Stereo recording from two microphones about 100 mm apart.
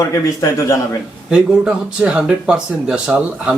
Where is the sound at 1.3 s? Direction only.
10° right (ahead or behind).